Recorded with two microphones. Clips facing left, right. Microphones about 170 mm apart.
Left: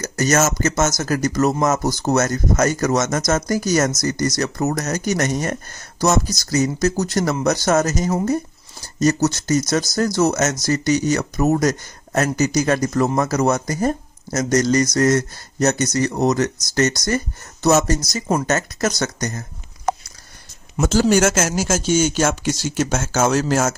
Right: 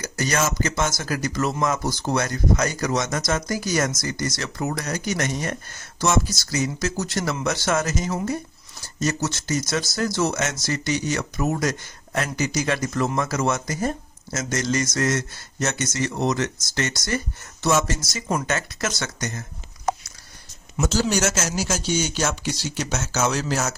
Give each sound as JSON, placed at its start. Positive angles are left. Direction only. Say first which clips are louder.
{"t": 0.0, "sound": "speech", "louder": "left 6 dB", "side_deg": 45}
{"t": 20.7, "sound": "speech", "louder": "left 6 dB", "side_deg": 50}